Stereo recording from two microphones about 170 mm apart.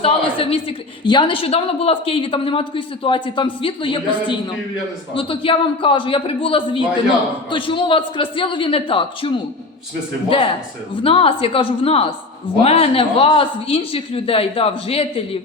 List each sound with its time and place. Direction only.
0.0 s a woman's voice: 35° left (ahead or behind)